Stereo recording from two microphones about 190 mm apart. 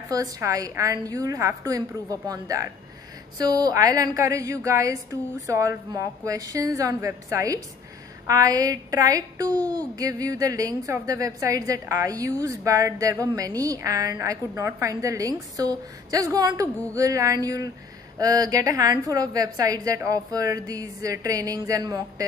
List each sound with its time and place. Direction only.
0.1 s a woman's voice: 20° right (ahead or behind)